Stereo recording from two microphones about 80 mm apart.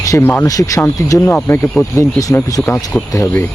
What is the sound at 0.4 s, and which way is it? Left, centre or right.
Speech, left.